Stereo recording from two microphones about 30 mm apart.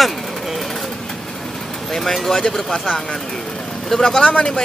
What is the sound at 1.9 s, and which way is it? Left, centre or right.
Speech, centre.